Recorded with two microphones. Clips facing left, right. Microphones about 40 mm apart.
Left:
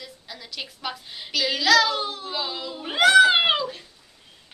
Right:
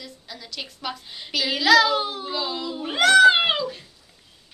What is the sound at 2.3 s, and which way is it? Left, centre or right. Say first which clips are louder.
A woman's voice: right 2 dB; centre.